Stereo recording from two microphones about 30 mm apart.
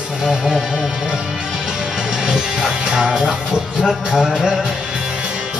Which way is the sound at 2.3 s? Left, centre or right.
Right.